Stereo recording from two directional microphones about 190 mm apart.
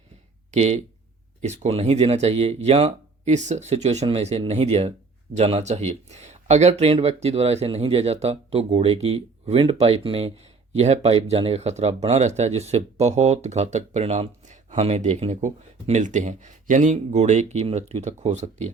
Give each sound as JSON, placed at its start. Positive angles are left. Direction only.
{"t": 0.5, "sound": "speech", "side_deg": -35}